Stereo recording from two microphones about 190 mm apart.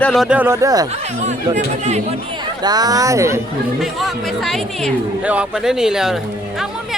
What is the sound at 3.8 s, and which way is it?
Speech, centre (ahead or behind).